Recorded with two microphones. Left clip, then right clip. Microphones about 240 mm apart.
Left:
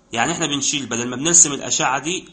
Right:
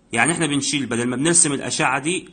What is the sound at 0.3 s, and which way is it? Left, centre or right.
A man's voice, right.